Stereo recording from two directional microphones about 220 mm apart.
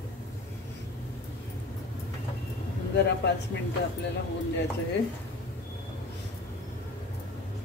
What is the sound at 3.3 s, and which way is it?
Speech, 50° left (ahead or behind).